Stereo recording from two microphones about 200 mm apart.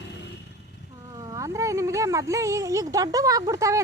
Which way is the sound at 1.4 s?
15° right (ahead or behind).